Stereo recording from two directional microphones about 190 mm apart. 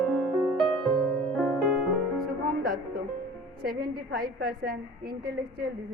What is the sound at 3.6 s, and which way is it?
A woman's voice, 55° right (ahead or behind).